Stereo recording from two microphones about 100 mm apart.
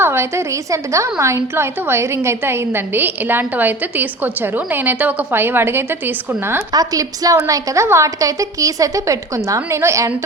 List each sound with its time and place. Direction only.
0.0 s a woman's voice: 25° right (ahead or behind)
6.7 s a woman's voice: 40° right (ahead or behind)